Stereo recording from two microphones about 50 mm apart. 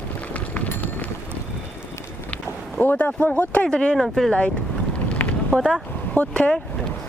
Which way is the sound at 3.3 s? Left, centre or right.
Left.